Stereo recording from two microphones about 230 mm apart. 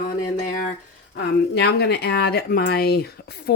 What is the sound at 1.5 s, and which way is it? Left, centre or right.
Speech, left.